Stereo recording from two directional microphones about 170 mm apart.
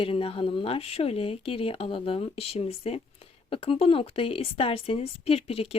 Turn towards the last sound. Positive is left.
turn(degrees=35)  # may be behind; listen again after turning